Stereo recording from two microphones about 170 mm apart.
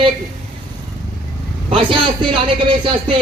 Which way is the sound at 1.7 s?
30° right (ahead or behind).